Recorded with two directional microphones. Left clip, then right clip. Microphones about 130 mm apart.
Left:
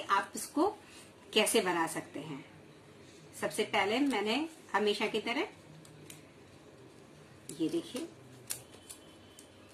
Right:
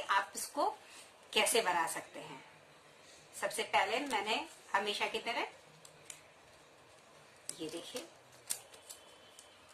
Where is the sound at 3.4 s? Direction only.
10° right (ahead or behind).